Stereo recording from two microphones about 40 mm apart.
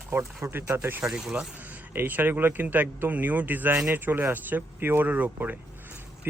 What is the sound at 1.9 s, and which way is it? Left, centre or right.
Speech, right.